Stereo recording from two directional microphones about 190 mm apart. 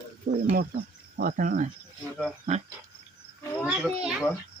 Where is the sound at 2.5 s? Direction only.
35° right (ahead or behind).